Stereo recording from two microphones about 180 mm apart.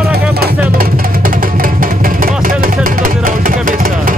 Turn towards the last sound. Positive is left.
turn(degrees=-50)  # may be behind; listen again after turning